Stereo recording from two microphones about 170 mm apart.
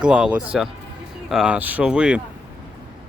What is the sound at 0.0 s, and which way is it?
Speech, 5° right (ahead or behind).